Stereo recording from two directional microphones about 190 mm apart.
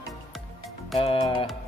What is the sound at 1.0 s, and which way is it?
Speech, 25° left (ahead or behind).